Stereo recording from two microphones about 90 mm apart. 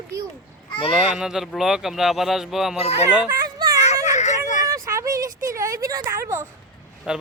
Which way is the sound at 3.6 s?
50° right (ahead or behind).